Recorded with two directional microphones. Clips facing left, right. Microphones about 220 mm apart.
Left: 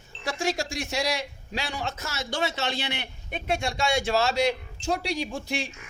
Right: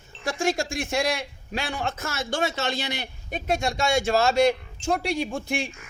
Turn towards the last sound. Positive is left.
turn(degrees=-50)  # may be behind; listen again after turning